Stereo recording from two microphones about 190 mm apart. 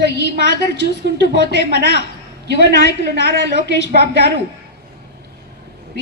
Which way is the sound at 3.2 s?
65° right (ahead or behind).